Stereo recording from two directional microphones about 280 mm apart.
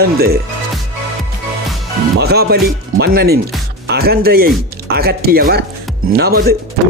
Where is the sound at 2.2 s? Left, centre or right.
Right.